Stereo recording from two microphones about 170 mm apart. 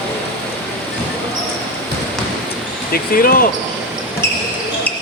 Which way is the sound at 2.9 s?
60° left (ahead or behind).